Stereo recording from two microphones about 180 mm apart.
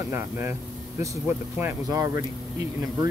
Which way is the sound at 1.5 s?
15° right (ahead or behind).